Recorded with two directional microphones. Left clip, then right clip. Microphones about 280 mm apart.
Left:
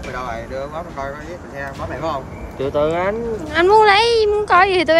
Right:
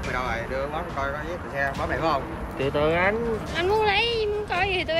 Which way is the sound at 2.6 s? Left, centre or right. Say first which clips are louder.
Left 4 dB; centre.